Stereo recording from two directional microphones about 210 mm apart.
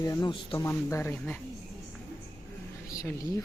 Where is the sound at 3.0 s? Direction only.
15° left (ahead or behind).